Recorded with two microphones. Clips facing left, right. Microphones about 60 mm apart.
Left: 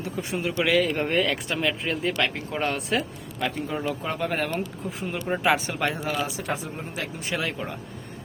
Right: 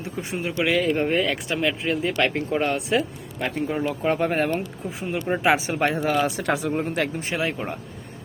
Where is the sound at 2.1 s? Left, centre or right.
Right.